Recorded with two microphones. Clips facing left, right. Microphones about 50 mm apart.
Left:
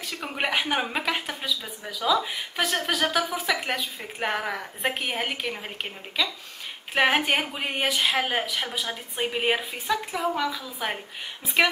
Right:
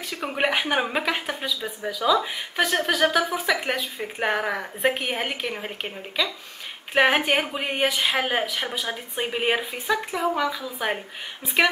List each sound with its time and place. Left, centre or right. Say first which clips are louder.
0.0 s speech: right 4 dB; centre